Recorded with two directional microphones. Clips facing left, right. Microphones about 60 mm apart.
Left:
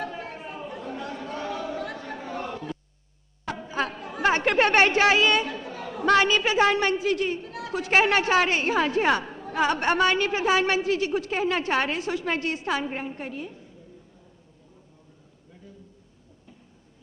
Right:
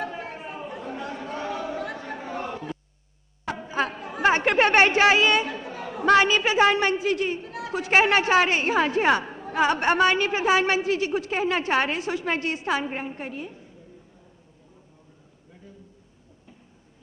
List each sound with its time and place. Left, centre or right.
0.0 s chatter: right
3.4 s speech: right